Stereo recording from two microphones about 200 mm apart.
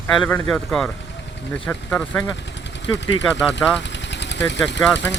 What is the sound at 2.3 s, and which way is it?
Vehicle, 60° left (ahead or behind).